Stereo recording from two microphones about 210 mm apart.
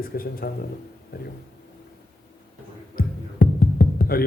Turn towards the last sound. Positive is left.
turn(degrees=45)  # may be behind; listen again after turning